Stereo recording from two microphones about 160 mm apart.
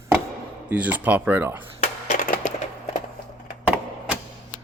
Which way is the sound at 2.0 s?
50° left (ahead or behind).